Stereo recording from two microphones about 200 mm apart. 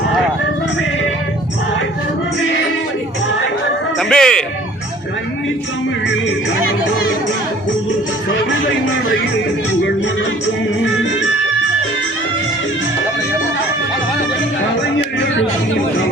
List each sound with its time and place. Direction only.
4.1 s a man's voice: 5° left (ahead or behind)